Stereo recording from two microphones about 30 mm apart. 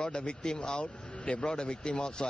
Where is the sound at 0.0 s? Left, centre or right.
Left.